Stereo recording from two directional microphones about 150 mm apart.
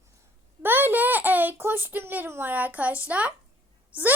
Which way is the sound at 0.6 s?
15° right (ahead or behind).